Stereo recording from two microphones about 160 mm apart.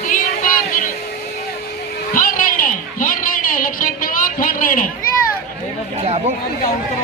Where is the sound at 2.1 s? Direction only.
55° left (ahead or behind).